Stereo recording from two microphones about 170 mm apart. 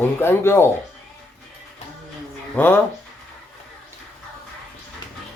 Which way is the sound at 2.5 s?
10° left (ahead or behind).